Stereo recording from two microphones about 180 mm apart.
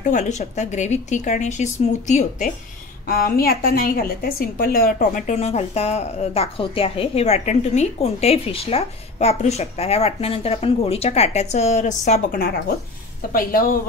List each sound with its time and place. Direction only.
0.0 s a woman's voice: 45° left (ahead or behind)
3.1 s a woman's voice: 55° left (ahead or behind)